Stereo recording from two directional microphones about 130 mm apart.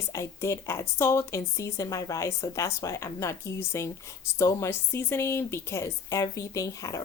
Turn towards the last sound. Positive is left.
turn(degrees=25)  # may be behind; listen again after turning